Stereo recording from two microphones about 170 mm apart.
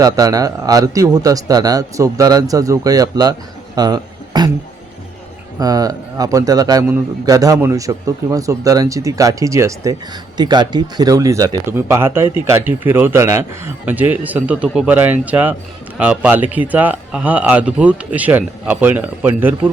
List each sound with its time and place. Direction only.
0.0 s a man's voice: 20° right (ahead or behind)
5.5 s a man's voice: 20° right (ahead or behind)